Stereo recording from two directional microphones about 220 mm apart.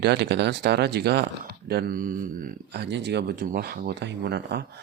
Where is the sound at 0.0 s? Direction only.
50° right (ahead or behind).